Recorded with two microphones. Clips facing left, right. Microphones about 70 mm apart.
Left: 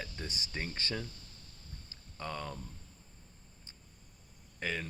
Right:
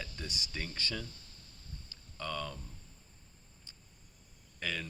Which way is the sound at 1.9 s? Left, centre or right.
Left.